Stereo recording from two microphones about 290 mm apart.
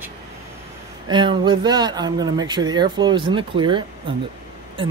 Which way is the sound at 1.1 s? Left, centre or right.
Centre.